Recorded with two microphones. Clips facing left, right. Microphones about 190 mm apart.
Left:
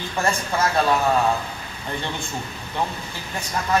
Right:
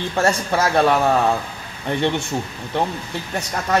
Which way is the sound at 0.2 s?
70° right (ahead or behind).